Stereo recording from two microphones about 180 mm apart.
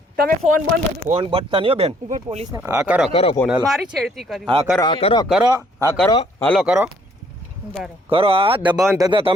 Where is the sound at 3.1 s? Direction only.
30° left (ahead or behind).